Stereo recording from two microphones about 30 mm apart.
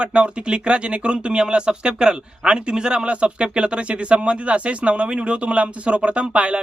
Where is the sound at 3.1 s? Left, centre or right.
Right.